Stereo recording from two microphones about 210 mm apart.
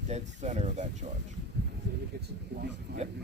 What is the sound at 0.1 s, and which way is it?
Speech, 35° right (ahead or behind).